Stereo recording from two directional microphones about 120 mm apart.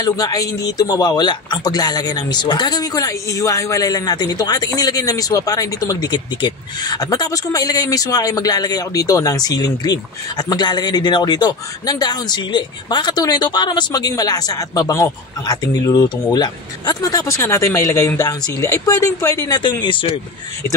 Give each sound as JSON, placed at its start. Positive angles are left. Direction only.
{"t": 0.0, "sound": "a man's voice", "side_deg": 30}